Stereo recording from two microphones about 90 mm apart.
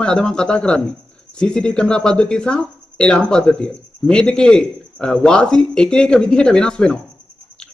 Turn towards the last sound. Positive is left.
turn(degrees=10)  # may be behind; listen again after turning